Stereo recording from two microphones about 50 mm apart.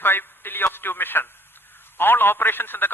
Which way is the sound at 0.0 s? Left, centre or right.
Left.